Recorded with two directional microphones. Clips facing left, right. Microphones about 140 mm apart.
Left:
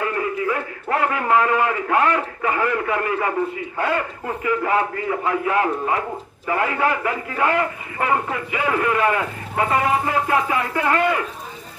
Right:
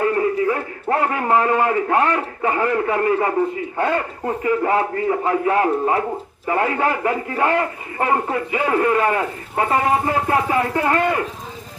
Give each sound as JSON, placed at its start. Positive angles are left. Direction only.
{"t": 0.0, "sound": "a man's voice", "side_deg": -35}